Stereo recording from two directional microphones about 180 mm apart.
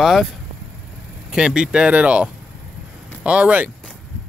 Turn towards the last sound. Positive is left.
turn(degrees=-5)  # may be behind; listen again after turning